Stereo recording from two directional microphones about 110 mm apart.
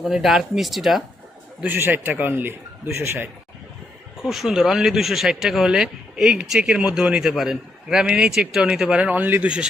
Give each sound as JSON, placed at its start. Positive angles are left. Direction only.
{"t": 0.0, "sound": "speech", "side_deg": -5}
{"t": 1.6, "sound": "a man's voice", "side_deg": -15}
{"t": 4.2, "sound": "speech", "side_deg": -5}